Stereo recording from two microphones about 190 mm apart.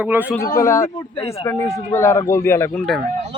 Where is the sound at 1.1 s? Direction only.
35° left (ahead or behind).